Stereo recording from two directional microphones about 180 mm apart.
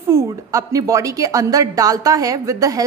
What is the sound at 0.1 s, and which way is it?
A woman's voice, 15° right (ahead or behind).